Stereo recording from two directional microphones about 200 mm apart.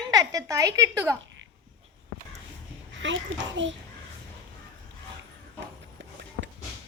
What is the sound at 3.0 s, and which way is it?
Speech, 70° right (ahead or behind).